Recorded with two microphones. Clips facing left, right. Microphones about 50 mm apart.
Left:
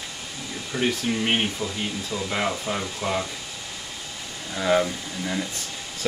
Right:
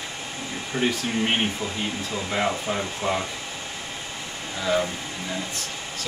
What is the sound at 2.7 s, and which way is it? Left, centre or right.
Speech, centre.